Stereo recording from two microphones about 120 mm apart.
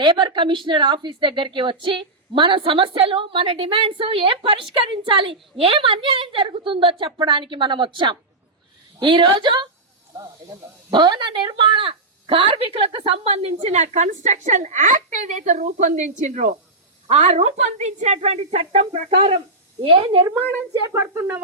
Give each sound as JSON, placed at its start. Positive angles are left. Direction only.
{"t": 0.0, "sound": "a woman's voice", "side_deg": -40}
{"t": 10.9, "sound": "a woman's voice", "side_deg": -40}
{"t": 17.1, "sound": "a woman's voice", "side_deg": -65}
{"t": 20.8, "sound": "speech", "side_deg": -25}